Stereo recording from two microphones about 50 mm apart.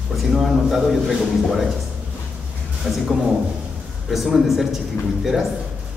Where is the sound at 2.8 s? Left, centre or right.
Centre.